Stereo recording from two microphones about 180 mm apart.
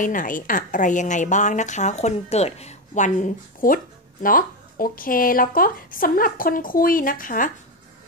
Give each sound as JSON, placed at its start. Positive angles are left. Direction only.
{"t": 0.0, "sound": "a woman's voice", "side_deg": 45}